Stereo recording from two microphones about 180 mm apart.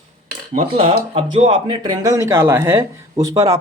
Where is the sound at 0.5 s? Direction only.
30° right (ahead or behind).